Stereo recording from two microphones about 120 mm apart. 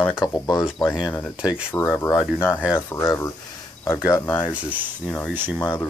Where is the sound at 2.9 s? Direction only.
25° left (ahead or behind).